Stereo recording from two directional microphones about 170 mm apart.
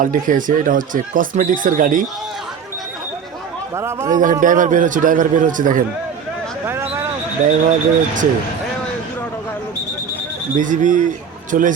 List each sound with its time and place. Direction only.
0.0 s speech: 50° right (ahead or behind)
3.8 s a man's voice: 15° right (ahead or behind)
4.2 s speech: 50° right (ahead or behind)
6.7 s a sound: 15° right (ahead or behind)
7.4 s speech: 50° right (ahead or behind)
10.6 s speech: 50° right (ahead or behind)